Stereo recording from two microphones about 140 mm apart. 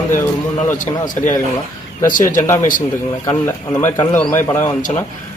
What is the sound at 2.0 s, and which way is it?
Speech, 75° left (ahead or behind).